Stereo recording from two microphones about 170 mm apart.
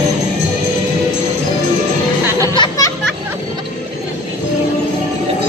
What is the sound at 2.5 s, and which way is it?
Music, 25° left (ahead or behind).